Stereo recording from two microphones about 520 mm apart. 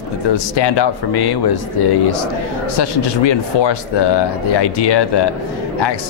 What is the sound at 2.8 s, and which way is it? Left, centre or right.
Speech, left.